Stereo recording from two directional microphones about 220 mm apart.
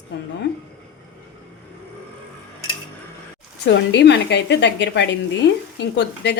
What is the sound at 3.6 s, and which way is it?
Speech, 50° left (ahead or behind).